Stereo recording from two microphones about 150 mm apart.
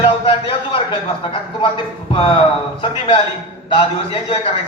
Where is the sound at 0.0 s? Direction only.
35° left (ahead or behind).